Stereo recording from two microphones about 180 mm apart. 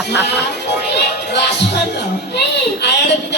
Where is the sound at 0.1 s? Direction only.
70° left (ahead or behind).